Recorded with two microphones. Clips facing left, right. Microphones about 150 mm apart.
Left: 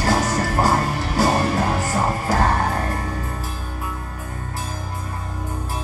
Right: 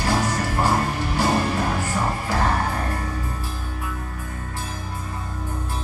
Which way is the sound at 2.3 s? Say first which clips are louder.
Left 4 dB; 40° left (ahead or behind).